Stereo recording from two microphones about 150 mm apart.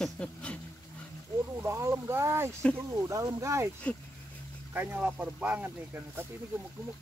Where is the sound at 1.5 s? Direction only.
15° right (ahead or behind).